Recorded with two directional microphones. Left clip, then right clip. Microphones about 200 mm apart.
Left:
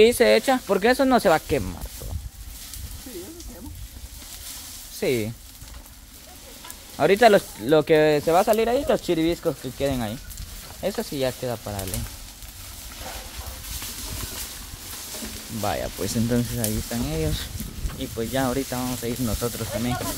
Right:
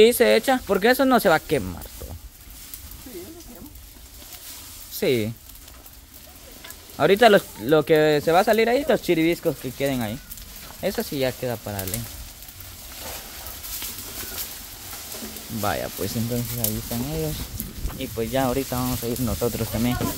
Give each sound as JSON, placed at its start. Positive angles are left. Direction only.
{"t": 0.0, "sound": "speech", "side_deg": -5}
{"t": 5.0, "sound": "speech", "side_deg": -15}
{"t": 7.0, "sound": "speech", "side_deg": -10}
{"t": 15.6, "sound": "speech", "side_deg": -10}
{"t": 16.3, "sound": "speech", "side_deg": 30}
{"t": 17.9, "sound": "speech", "side_deg": -20}
{"t": 19.5, "sound": "speech", "side_deg": -30}